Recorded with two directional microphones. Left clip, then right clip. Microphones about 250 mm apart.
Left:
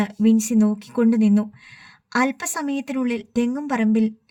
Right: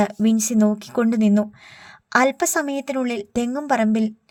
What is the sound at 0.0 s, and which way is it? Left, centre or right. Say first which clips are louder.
Speech: right 1 dB; right.